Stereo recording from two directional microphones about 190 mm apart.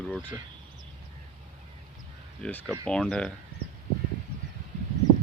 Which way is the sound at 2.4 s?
5° left (ahead or behind).